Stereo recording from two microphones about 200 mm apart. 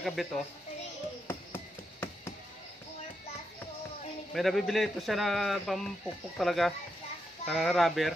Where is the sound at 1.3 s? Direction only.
10° left (ahead or behind).